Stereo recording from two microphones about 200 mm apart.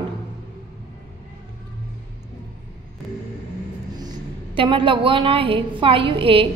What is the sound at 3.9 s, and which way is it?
A woman's voice, 25° right (ahead or behind).